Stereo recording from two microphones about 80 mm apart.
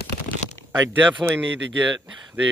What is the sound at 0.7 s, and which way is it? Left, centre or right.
Speech, right.